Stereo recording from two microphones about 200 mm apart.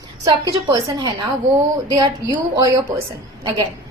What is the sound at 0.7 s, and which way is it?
A woman's voice, 20° right (ahead or behind).